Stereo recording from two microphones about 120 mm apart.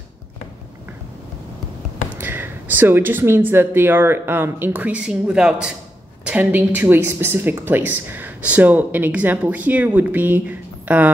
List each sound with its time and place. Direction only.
2.1 s a woman's voice: 15° right (ahead or behind)